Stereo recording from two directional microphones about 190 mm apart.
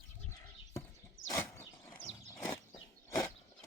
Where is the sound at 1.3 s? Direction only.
15° left (ahead or behind).